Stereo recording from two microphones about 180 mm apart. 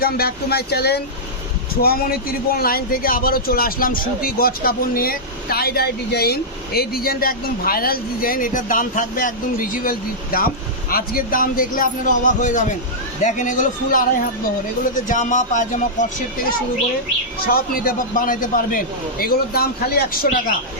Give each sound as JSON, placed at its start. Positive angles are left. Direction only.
{"t": 0.0, "sound": "a man's voice", "side_deg": 60}
{"t": 17.4, "sound": "a man's voice", "side_deg": 55}